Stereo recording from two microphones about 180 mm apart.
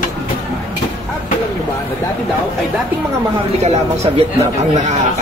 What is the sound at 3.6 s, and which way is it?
Speech, 35° right (ahead or behind).